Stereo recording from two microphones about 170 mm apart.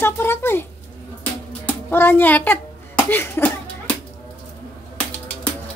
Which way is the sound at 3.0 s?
15° left (ahead or behind).